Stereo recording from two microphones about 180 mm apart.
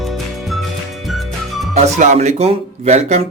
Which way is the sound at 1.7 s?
40° right (ahead or behind).